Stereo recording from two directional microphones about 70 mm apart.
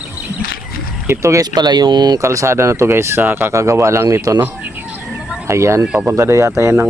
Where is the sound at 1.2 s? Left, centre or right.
Right.